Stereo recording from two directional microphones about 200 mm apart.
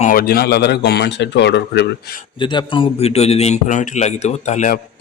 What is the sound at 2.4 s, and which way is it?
A man's voice, 25° left (ahead or behind).